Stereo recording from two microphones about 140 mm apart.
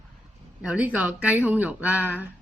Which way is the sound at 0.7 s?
10° right (ahead or behind).